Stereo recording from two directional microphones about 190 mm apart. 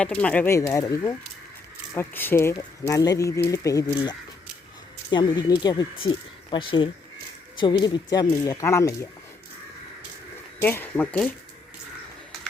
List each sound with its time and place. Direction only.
0.0 s speech: 5° left (ahead or behind)
5.1 s speech: 20° left (ahead or behind)
10.6 s speech: 10° left (ahead or behind)